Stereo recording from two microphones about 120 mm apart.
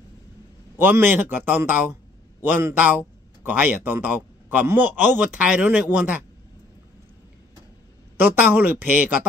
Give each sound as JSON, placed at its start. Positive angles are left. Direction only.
{"t": 0.7, "sound": "speech", "side_deg": -15}
{"t": 8.2, "sound": "speech", "side_deg": -15}